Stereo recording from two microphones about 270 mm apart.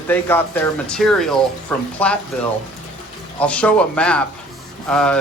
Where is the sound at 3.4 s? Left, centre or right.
Centre.